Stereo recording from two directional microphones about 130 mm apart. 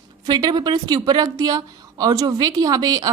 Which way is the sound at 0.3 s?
30° right (ahead or behind).